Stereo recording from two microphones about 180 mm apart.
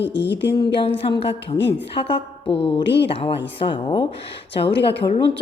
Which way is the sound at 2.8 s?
70° left (ahead or behind).